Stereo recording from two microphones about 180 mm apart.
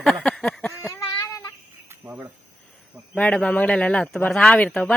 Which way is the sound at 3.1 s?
5° left (ahead or behind).